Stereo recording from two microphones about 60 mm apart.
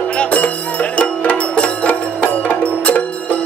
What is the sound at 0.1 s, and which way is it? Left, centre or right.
Music, left.